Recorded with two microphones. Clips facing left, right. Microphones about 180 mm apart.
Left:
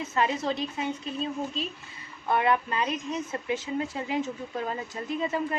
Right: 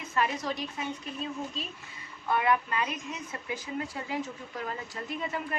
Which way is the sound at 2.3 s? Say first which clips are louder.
Left 2 dB; 30° left (ahead or behind).